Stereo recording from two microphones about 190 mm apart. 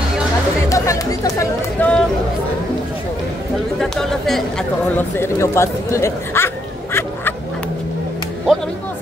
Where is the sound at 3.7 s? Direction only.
5° left (ahead or behind).